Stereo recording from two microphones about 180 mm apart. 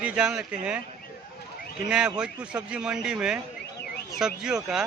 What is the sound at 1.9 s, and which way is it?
A man's voice, 5° right (ahead or behind).